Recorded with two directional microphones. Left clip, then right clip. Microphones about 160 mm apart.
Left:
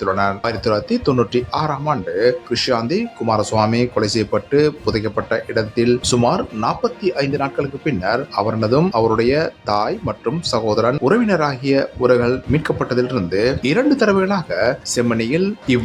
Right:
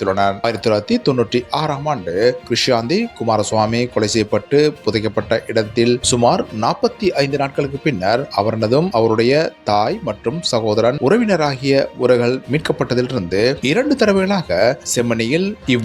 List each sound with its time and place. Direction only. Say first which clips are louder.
0.0 s speech: right 2 dB; 25° right (ahead or behind)